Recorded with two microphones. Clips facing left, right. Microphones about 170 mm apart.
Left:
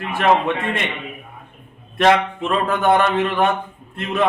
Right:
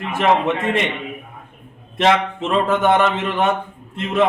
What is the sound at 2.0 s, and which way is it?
A man's voice, 20° right (ahead or behind).